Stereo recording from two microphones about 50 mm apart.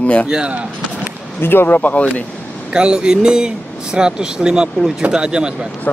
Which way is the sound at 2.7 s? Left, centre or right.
Centre.